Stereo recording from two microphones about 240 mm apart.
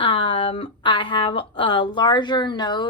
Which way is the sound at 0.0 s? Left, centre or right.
Left.